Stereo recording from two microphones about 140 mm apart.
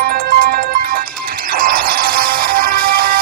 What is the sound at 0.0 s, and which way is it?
Music, 90° right.